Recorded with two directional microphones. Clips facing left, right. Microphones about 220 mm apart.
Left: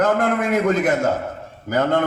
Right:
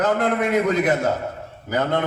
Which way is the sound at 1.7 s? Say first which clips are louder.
Left 3 dB; 50° left (ahead or behind).